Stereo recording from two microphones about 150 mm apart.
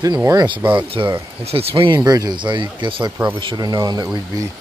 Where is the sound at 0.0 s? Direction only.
25° right (ahead or behind).